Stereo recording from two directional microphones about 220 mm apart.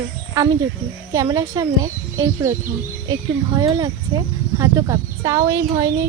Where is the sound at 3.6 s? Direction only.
15° right (ahead or behind).